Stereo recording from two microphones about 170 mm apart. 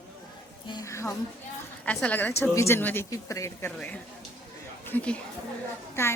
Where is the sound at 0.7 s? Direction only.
20° left (ahead or behind).